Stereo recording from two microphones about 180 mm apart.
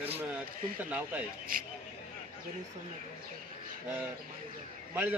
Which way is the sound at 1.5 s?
50° right (ahead or behind).